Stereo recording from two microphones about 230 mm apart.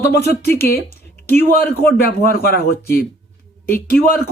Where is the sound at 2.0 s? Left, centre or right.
Left.